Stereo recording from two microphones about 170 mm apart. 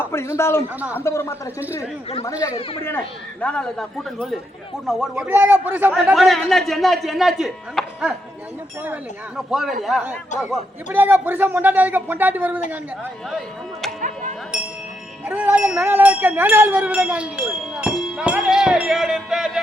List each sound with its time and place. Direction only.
0.0 s a man's voice: 15° left (ahead or behind)
3.4 s a man's voice: 5° left (ahead or behind); by 5.9 s 10° right (ahead or behind)
6.1 s a man's voice: centre (ahead or behind)
9.5 s a man's voice: centre (ahead or behind)
14.0 s music: 45° right (ahead or behind)
15.3 s speech: 10° right (ahead or behind)